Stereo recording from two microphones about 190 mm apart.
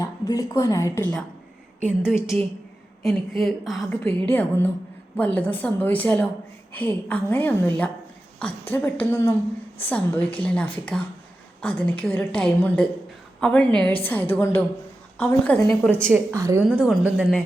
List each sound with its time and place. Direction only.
0.0 s a woman's voice: 20° left (ahead or behind)
3.0 s a woman's voice: centre (ahead or behind)
16.1 s a woman's voice: 15° right (ahead or behind)
16.6 s a woman's voice: 5° right (ahead or behind)